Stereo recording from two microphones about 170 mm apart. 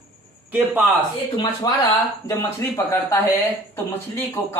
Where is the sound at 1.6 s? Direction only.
25° left (ahead or behind).